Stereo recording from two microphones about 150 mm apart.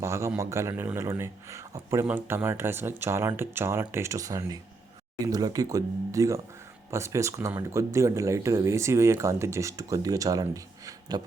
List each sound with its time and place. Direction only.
0.0 s speech: 20° right (ahead or behind)